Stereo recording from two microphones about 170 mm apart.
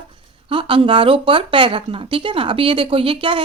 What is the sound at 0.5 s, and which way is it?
Speech, 30° right (ahead or behind).